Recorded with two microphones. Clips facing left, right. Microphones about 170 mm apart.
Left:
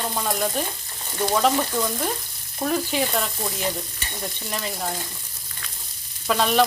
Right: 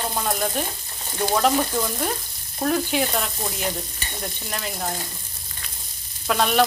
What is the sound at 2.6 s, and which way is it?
Speech, centre (ahead or behind).